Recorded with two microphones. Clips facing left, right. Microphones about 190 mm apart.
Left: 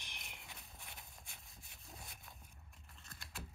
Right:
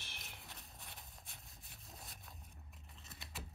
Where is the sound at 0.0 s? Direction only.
15° left (ahead or behind).